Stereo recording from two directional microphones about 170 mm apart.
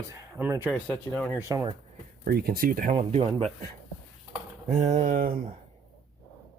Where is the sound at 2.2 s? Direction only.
65° right (ahead or behind).